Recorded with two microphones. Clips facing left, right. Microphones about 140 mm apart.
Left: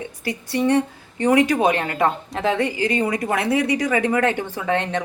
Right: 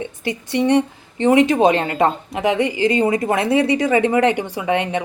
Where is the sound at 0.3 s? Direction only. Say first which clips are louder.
Right 2 dB; 20° right (ahead or behind).